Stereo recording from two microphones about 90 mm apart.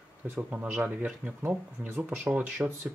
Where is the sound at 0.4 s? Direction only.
20° right (ahead or behind).